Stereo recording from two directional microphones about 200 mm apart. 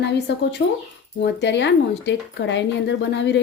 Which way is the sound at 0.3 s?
55° left (ahead or behind).